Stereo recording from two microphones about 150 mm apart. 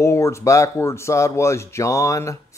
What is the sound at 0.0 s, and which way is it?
Speech, 20° left (ahead or behind).